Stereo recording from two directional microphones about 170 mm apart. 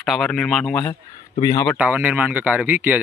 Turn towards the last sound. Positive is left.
turn(degrees=-10)  # may be behind; listen again after turning